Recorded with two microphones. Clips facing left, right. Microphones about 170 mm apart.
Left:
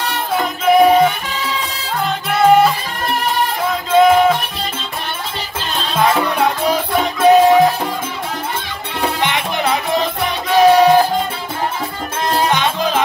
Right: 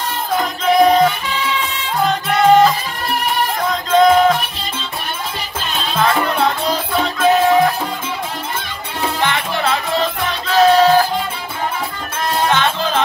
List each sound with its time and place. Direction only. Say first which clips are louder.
0.7 s music: left 1 dB; 10° left (ahead or behind)
2.2 s music: even; 5° left (ahead or behind)
3.9 s music: even; 10° left (ahead or behind)
5.9 s music: left 1 dB; 10° left (ahead or behind)
9.2 s music: right 2 dB; 15° left (ahead or behind)
12.4 s music: even; 15° left (ahead or behind)